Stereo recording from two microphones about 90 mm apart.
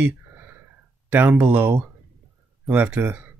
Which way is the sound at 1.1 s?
15° right (ahead or behind).